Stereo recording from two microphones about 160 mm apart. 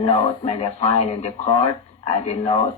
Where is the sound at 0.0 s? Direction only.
40° left (ahead or behind).